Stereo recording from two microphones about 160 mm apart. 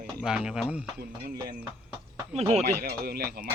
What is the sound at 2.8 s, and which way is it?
Speech, 75° right (ahead or behind).